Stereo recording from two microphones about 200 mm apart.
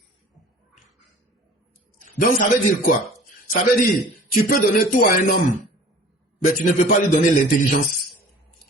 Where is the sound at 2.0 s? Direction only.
40° left (ahead or behind).